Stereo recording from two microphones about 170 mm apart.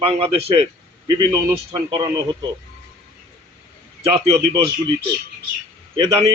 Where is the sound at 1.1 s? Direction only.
20° right (ahead or behind).